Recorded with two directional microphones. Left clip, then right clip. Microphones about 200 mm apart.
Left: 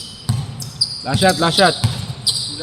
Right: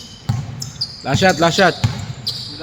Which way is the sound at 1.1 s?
35° right (ahead or behind).